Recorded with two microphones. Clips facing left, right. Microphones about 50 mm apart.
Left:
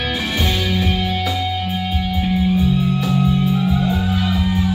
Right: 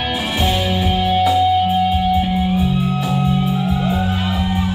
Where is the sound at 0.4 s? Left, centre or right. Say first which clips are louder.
Right 3 dB; centre.